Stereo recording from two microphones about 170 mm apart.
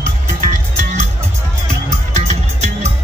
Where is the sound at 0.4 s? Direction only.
50° right (ahead or behind).